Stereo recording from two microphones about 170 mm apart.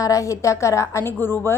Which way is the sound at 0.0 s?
20° left (ahead or behind).